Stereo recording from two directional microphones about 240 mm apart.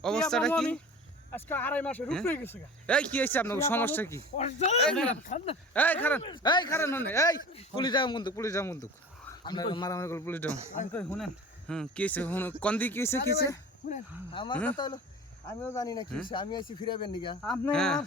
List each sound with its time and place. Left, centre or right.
0.0 s speech: centre
4.4 s speech: left
4.8 s speech: centre
6.2 s speech: centre
7.5 s speech: left
14.5 s speech: centre
14.8 s speech: centre
17.4 s speech: centre